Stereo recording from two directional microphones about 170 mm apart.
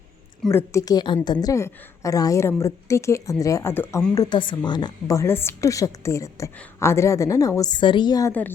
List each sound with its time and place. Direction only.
0.5 s a woman's voice: 20° left (ahead or behind)
8.3 s a woman's voice: 10° left (ahead or behind)